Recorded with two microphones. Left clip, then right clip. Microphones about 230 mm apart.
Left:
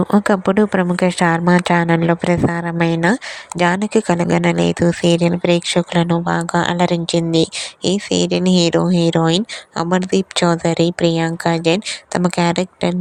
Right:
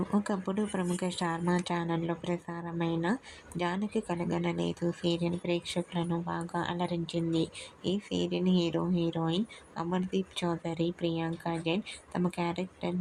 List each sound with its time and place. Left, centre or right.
0.1 s speech: left